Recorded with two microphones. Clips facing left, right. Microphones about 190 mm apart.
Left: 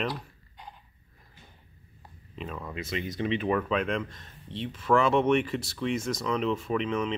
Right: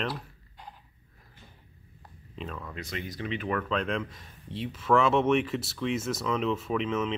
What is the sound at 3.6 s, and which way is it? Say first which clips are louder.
Speech: left 2 dB; 5° left (ahead or behind).